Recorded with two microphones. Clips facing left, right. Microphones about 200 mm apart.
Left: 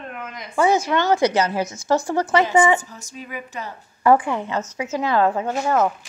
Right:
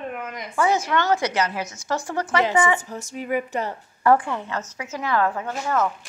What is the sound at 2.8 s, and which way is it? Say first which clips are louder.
Speech: right 8 dB; 55° right (ahead or behind).